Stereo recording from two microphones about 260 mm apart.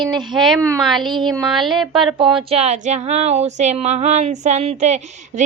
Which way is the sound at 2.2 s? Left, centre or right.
Centre.